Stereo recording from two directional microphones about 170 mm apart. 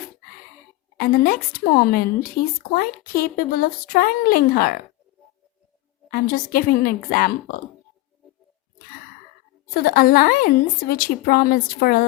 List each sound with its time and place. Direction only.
0.9 s a woman's voice: 60° left (ahead or behind)
6.1 s a woman's voice: 60° left (ahead or behind)
9.7 s a woman's voice: 60° left (ahead or behind)